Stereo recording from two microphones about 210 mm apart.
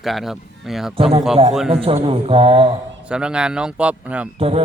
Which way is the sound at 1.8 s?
25° right (ahead or behind).